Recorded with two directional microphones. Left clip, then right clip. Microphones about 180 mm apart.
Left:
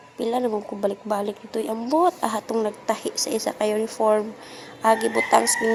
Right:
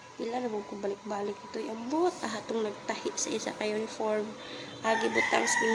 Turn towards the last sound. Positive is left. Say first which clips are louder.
# left 7 dB
turn(degrees=35)  # may be behind; listen again after turning